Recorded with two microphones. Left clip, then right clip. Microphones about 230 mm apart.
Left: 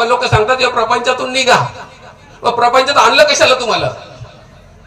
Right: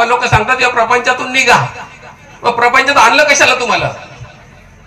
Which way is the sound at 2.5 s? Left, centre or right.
Left.